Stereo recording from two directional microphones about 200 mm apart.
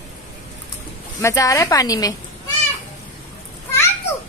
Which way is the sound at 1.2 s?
15° left (ahead or behind).